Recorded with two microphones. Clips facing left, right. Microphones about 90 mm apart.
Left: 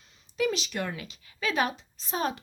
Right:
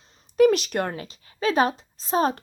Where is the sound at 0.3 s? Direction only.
50° right (ahead or behind).